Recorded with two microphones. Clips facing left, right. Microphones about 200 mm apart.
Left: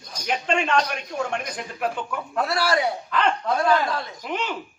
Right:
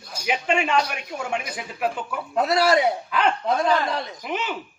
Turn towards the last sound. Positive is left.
turn(degrees=-5)  # may be behind; listen again after turning